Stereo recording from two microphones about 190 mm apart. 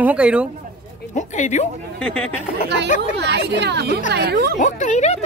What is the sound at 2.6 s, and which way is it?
Speech, 65° right (ahead or behind).